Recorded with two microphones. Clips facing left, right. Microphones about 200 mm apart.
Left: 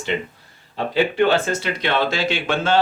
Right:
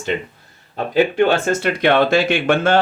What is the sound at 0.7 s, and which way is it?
Speech, 50° right (ahead or behind).